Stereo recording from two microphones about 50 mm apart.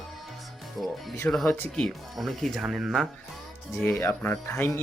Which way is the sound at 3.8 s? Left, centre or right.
Left.